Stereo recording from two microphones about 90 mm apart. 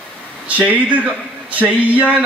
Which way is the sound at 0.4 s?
15° right (ahead or behind).